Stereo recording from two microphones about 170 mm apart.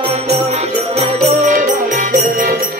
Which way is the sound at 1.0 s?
45° right (ahead or behind).